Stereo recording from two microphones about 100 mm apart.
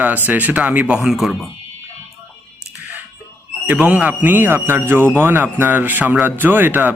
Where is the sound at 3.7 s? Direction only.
10° right (ahead or behind).